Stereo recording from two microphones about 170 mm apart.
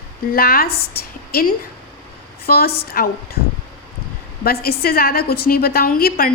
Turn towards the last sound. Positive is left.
turn(degrees=60)  # may be behind; listen again after turning